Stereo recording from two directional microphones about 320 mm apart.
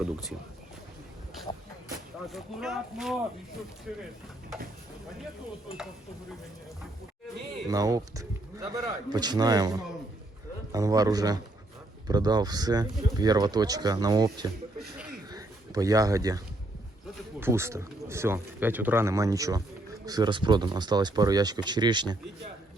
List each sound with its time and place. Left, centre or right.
2.3 s speech: centre
7.7 s speech: centre
15.3 s a sound: centre
17.4 s speech: centre